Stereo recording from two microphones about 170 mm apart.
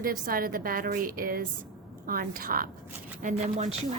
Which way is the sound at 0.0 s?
55° right (ahead or behind).